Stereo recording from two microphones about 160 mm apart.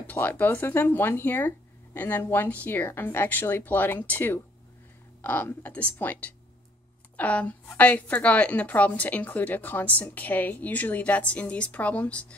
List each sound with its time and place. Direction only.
0.0 s a woman's voice: 10° left (ahead or behind)